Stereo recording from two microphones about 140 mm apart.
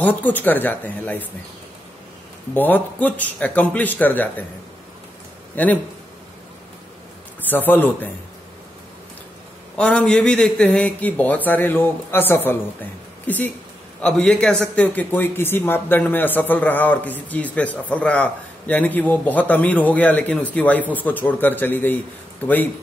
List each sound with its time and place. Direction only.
0.0 s a man's voice: 10° left (ahead or behind)
2.5 s a man's voice: 10° left (ahead or behind)
5.6 s a man's voice: 10° left (ahead or behind)
7.4 s a man's voice: 15° left (ahead or behind)
9.8 s a man's voice: 5° left (ahead or behind)